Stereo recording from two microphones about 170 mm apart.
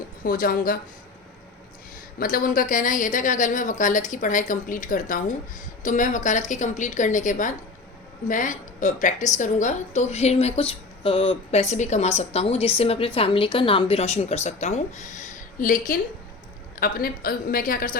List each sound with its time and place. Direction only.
0.2 s a woman's voice: 55° left (ahead or behind)
2.1 s a woman's voice: 55° left (ahead or behind)